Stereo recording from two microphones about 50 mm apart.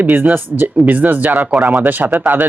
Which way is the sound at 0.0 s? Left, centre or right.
Right.